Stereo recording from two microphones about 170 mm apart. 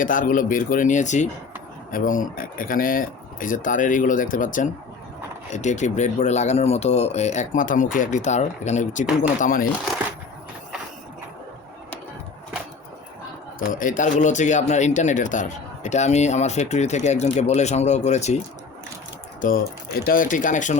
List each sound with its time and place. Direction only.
0.0 s speech: 50° left (ahead or behind)
13.6 s speech: 55° left (ahead or behind)
19.4 s speech: 55° left (ahead or behind)